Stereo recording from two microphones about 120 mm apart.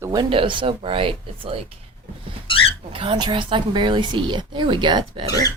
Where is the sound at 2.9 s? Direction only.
45° right (ahead or behind).